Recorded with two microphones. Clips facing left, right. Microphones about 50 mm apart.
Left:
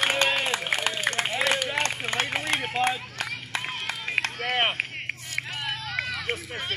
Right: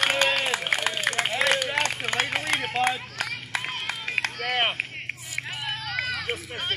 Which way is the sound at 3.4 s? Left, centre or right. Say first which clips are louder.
Right 1 dB; centre.